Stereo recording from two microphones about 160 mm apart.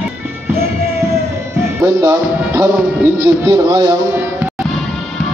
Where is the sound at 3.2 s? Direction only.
20° right (ahead or behind).